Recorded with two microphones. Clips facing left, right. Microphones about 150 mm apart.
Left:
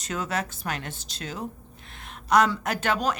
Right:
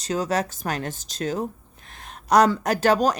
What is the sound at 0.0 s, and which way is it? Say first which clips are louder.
Speech: right 6 dB; 35° right (ahead or behind).